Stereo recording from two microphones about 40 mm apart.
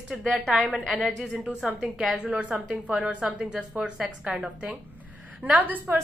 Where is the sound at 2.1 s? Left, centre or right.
Right.